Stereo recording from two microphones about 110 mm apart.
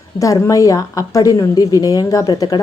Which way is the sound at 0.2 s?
30° left (ahead or behind).